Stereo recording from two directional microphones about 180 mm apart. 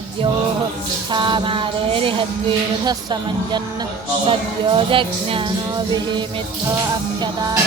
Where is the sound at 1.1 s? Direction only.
25° right (ahead or behind).